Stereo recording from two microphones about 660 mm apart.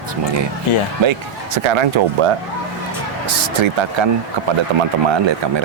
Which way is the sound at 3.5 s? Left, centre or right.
Right.